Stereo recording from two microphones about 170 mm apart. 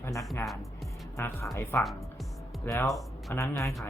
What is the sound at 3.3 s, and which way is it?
Speech, 15° left (ahead or behind).